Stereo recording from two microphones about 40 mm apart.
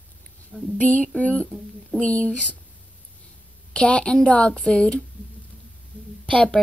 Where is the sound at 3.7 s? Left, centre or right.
Left.